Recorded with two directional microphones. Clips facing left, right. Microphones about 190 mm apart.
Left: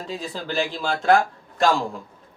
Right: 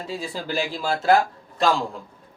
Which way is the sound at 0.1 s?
10° right (ahead or behind).